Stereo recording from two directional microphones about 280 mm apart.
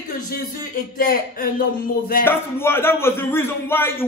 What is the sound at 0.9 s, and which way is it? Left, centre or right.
Speech, left.